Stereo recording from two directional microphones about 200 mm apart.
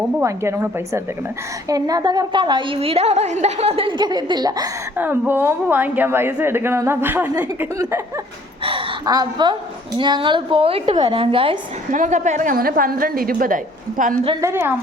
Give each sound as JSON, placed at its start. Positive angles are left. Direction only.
{"t": 0.2, "sound": "a woman's voice", "side_deg": -15}
{"t": 8.6, "sound": "a woman's voice", "side_deg": -25}
{"t": 11.9, "sound": "a woman's voice", "side_deg": -40}
{"t": 14.4, "sound": "a woman's voice", "side_deg": -10}